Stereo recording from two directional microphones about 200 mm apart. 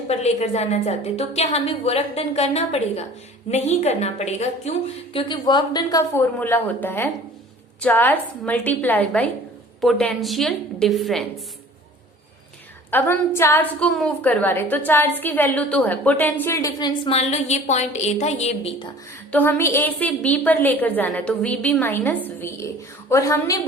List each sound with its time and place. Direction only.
0.1 s a woman's voice: 30° left (ahead or behind)
5.1 s a woman's voice: 20° left (ahead or behind); by 11.3 s centre (ahead or behind)
12.9 s a woman's voice: 10° left (ahead or behind)
17.1 s a woman's voice: 30° left (ahead or behind)
19.3 s a woman's voice: 10° left (ahead or behind)